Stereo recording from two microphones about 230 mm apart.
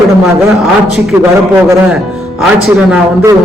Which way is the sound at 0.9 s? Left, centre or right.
Centre.